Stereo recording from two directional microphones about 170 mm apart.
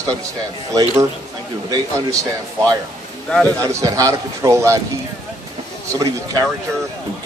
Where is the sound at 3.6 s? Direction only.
20° right (ahead or behind).